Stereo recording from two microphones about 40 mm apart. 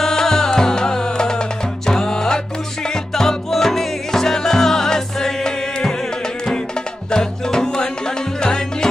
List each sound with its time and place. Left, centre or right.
0.0 s music: centre
7.1 s music: centre